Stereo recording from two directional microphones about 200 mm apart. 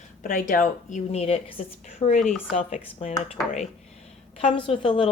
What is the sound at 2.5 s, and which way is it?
Speech, 35° left (ahead or behind).